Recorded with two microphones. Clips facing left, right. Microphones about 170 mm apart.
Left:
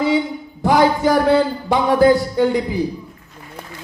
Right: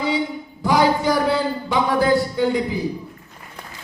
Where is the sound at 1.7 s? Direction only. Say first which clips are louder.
Left 5 dB; 45° left (ahead or behind).